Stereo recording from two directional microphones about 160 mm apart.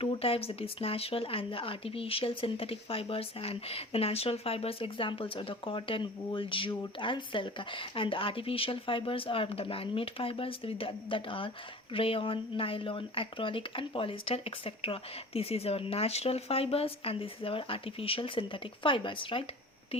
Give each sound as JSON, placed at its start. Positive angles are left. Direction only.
{"t": 0.0, "sound": "speech", "side_deg": 35}